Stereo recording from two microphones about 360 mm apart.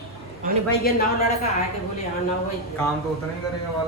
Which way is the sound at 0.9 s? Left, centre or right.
Left.